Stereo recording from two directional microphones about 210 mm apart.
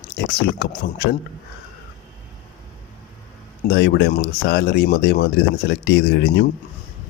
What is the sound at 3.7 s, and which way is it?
Speech, 50° left (ahead or behind).